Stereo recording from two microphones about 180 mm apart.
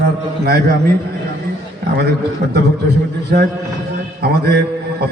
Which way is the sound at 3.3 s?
55° right (ahead or behind).